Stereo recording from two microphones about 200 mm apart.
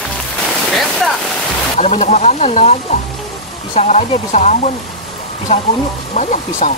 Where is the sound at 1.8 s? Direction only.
30° left (ahead or behind).